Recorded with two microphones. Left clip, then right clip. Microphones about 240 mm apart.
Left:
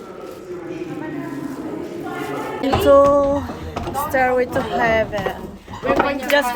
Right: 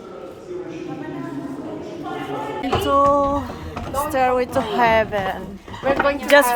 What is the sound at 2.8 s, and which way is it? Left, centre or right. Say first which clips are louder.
Speech: left 4 dB; centre.